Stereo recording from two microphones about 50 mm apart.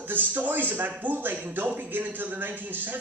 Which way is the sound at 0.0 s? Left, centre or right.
Right.